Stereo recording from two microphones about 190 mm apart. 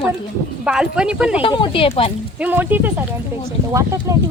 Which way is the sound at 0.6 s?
5° right (ahead or behind).